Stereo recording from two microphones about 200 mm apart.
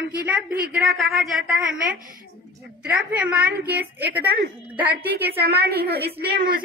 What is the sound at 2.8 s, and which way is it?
A woman's voice, 5° right (ahead or behind).